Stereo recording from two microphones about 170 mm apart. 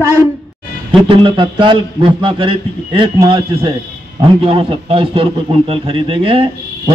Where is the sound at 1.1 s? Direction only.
30° right (ahead or behind).